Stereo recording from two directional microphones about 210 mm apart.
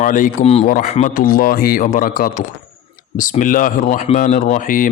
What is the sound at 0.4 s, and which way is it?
A man's voice, 30° left (ahead or behind).